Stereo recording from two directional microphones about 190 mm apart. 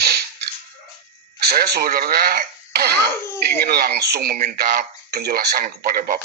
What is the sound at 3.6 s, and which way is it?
Speech, 55° right (ahead or behind).